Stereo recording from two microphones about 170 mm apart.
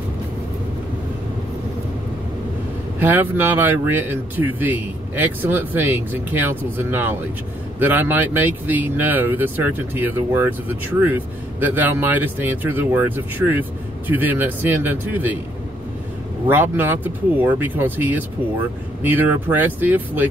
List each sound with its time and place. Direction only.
3.0 s speech: 10° right (ahead or behind)
16.4 s speech: 10° right (ahead or behind)